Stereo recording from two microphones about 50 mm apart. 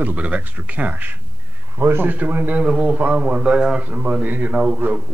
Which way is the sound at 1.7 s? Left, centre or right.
Right.